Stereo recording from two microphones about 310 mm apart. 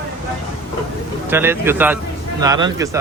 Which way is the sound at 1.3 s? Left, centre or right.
Centre.